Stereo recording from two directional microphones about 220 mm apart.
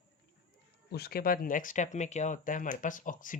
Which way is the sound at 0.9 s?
45° left (ahead or behind).